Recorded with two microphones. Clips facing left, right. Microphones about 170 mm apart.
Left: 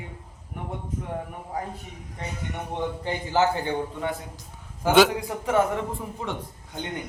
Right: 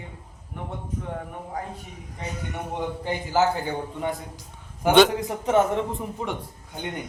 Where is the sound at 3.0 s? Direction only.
10° right (ahead or behind).